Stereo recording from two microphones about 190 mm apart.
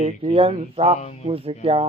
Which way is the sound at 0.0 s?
30° right (ahead or behind).